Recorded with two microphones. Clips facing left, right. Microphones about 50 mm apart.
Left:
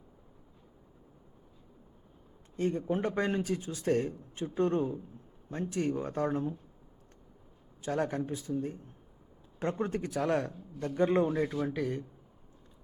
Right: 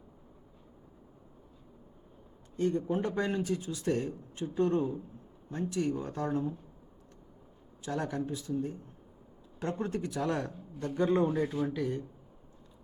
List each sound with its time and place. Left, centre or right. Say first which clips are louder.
2.7 s speech: even; left
7.9 s speech: left 2 dB; left
9.6 s speech: left 1 dB; left